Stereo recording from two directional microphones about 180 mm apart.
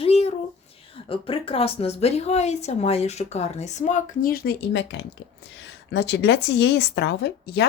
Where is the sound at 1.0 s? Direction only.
30° left (ahead or behind).